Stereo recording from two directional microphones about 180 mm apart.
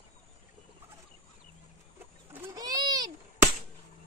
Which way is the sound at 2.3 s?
15° right (ahead or behind).